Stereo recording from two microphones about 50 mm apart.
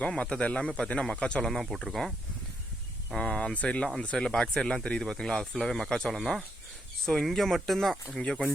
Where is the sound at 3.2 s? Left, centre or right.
Centre.